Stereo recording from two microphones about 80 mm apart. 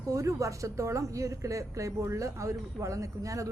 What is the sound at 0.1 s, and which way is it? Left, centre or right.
A woman's voice, right.